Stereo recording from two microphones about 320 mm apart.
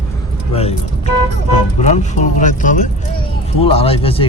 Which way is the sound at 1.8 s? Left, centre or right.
Left.